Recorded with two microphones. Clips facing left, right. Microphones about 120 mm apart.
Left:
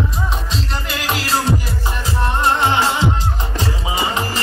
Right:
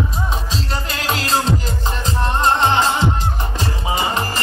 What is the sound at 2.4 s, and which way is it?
Music, 15° left (ahead or behind).